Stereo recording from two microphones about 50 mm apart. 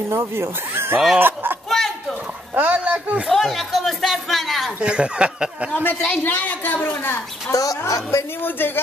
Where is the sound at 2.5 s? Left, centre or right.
Right.